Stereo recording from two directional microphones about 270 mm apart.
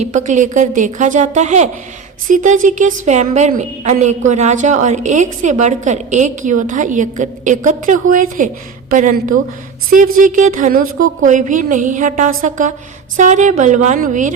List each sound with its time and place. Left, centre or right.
0.0 s a woman's voice: right